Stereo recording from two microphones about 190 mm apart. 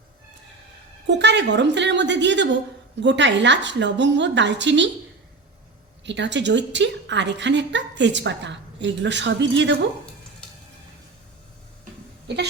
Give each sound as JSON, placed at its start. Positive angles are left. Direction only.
{"t": 1.0, "sound": "a woman's voice", "side_deg": -65}
{"t": 6.1, "sound": "a woman's voice", "side_deg": -70}
{"t": 10.4, "sound": "stir", "side_deg": 5}
{"t": 12.3, "sound": "goat", "side_deg": -60}